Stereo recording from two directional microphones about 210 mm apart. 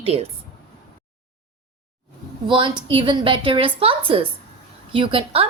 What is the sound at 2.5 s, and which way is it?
A woman's voice, 25° right (ahead or behind).